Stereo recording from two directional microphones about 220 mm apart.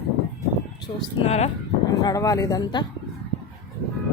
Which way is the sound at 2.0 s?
15° left (ahead or behind).